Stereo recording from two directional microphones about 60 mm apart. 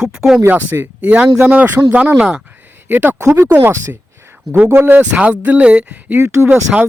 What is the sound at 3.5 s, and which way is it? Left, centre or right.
Speech, right.